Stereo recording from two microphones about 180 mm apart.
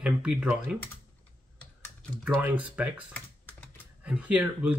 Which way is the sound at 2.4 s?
10° right (ahead or behind).